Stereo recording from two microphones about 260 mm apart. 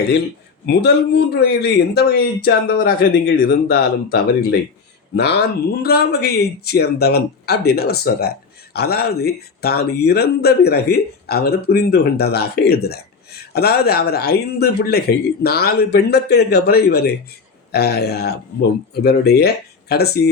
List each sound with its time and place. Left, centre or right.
0.6 s speech: left